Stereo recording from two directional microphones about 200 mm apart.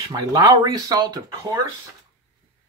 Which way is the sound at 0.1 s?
20° right (ahead or behind).